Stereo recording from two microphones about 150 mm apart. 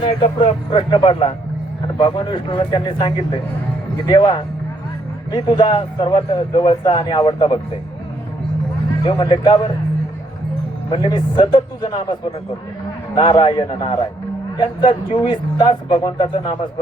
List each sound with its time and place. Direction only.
0.0 s speech: 35° left (ahead or behind)
9.0 s speech: 30° left (ahead or behind)
10.9 s speech: 30° left (ahead or behind)
13.4 s speech: 30° left (ahead or behind)